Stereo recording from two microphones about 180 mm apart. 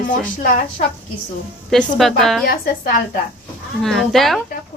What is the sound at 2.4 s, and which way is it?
Speech, 55° left (ahead or behind).